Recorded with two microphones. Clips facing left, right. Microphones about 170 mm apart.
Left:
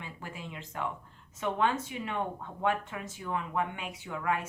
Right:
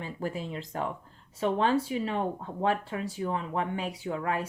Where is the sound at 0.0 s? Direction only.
40° right (ahead or behind).